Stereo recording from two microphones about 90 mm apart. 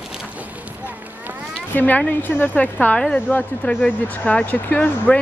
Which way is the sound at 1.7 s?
20° left (ahead or behind).